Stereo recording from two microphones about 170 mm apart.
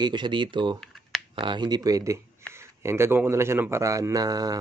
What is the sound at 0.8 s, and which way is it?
Computer keyboard, centre (ahead or behind).